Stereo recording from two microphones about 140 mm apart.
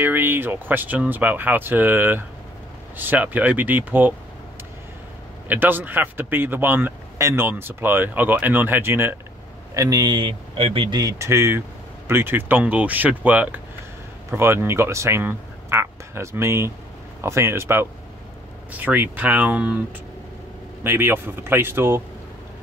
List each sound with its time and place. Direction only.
0.0 s speech: 15° right (ahead or behind)
5.5 s speech: 15° right (ahead or behind)
9.8 s speech: 25° right (ahead or behind); by 19.8 s 10° right (ahead or behind)
20.8 s speech: 15° right (ahead or behind)